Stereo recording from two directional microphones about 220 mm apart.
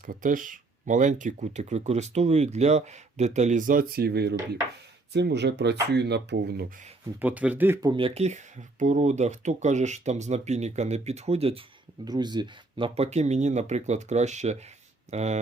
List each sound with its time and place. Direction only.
0.0 s speech: 40° right (ahead or behind)
7.2 s speech: 5° right (ahead or behind); by 15.4 s 30° right (ahead or behind)